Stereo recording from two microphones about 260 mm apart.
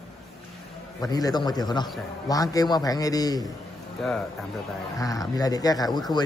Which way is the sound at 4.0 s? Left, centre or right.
Centre.